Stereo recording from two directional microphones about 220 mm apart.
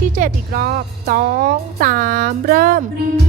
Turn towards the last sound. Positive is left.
turn(degrees=-40)  # may be behind; listen again after turning